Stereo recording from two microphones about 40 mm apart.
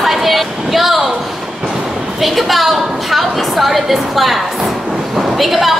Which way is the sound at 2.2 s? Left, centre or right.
Centre.